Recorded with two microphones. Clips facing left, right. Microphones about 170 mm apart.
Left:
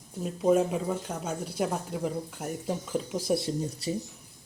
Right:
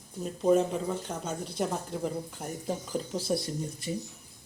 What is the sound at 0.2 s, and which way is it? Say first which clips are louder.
Speech: left 1 dB; 5° left (ahead or behind).